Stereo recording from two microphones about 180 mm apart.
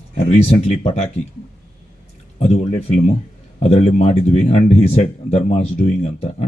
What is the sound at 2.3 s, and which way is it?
Speech, 35° left (ahead or behind).